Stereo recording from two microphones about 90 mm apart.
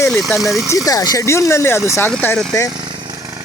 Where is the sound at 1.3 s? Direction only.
30° left (ahead or behind).